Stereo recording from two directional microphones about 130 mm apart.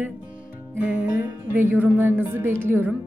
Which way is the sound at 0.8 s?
10° right (ahead or behind).